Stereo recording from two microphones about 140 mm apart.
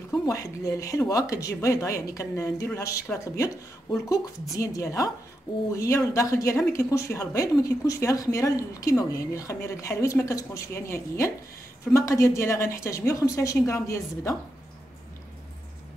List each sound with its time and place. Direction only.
0.1 s speech: 25° left (ahead or behind)